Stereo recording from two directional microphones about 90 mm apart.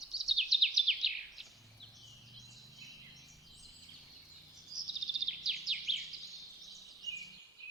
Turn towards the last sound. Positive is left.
turn(degrees=40)  # may be behind; listen again after turning